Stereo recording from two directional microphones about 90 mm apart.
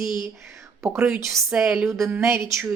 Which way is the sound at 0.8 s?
10° right (ahead or behind).